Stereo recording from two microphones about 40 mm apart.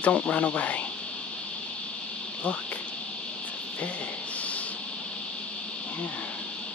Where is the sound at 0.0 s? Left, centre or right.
Left.